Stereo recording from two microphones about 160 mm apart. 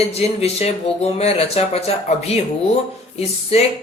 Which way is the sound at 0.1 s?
40° left (ahead or behind).